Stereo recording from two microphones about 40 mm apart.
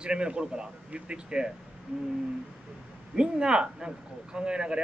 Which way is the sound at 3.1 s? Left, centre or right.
Centre.